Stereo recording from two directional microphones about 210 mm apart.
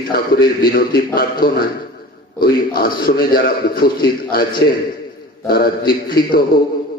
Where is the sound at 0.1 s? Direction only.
45° left (ahead or behind).